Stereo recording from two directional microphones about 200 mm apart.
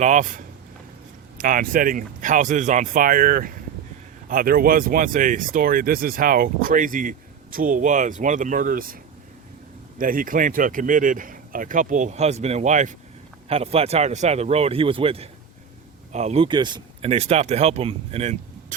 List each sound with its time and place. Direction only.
0.0 s speech: 35° right (ahead or behind)
10.0 s speech: 45° right (ahead or behind)